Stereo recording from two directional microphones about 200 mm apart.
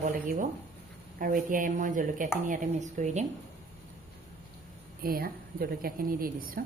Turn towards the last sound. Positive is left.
turn(degrees=-45)  # may be behind; listen again after turning